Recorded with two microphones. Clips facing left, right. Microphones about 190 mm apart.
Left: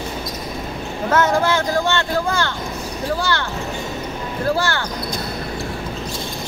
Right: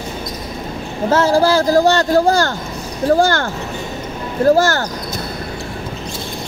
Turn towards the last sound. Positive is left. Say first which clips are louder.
# right 8 dB
turn(degrees=-40)  # may be behind; listen again after turning